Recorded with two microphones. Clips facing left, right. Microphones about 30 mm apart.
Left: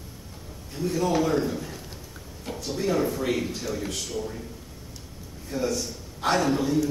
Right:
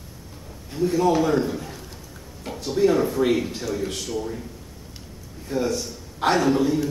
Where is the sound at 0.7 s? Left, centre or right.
Centre.